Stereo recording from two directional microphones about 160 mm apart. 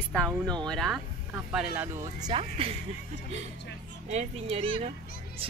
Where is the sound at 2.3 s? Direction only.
35° right (ahead or behind).